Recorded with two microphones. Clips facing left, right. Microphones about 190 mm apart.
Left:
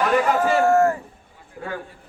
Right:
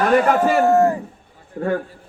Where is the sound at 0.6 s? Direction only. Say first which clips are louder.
Right 1 dB; 20° right (ahead or behind).